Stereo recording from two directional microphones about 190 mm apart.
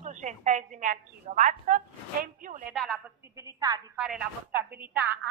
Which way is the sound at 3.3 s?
20° right (ahead or behind).